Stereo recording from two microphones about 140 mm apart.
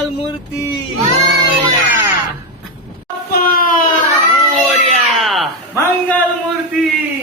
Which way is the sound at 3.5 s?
85° left.